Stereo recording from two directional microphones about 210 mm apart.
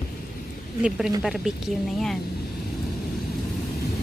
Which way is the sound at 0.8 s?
5° right (ahead or behind).